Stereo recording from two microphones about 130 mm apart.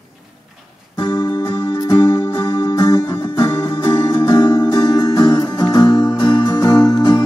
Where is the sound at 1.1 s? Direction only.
20° left (ahead or behind).